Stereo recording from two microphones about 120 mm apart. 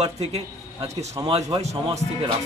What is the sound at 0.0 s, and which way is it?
Speech, 55° right (ahead or behind).